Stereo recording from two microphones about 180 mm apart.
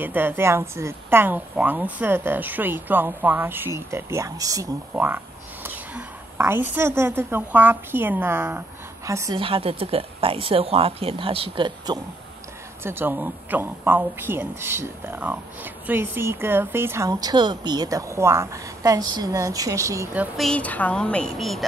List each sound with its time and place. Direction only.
0.0 s speech: 10° right (ahead or behind)
9.4 s speech: 30° right (ahead or behind)
12.8 s speech: 10° right (ahead or behind)
20.3 s a woman's voice: 5° left (ahead or behind)